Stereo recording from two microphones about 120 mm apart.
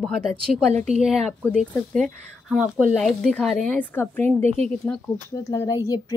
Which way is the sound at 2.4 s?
10° right (ahead or behind).